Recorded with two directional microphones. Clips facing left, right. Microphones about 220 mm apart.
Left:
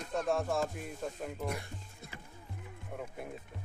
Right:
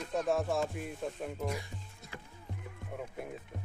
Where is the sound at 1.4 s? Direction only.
60° left (ahead or behind).